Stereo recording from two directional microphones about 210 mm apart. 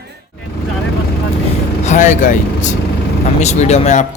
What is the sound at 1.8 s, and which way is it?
Speech, 35° left (ahead or behind).